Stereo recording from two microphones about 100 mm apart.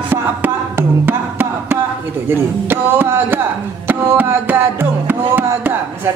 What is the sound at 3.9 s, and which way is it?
Music, 20° right (ahead or behind).